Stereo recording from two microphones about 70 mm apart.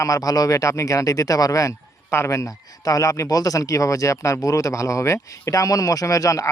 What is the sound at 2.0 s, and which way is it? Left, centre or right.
Speech, left.